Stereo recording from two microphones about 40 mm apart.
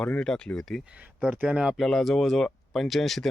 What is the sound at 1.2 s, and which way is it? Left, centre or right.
Speech, right.